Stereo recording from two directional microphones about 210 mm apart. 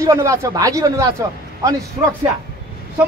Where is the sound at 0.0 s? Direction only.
15° right (ahead or behind).